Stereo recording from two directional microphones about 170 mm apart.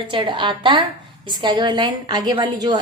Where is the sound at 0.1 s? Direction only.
30° right (ahead or behind).